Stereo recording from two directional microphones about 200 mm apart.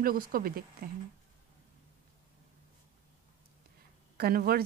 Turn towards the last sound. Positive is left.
turn(degrees=-50)  # may be behind; listen again after turning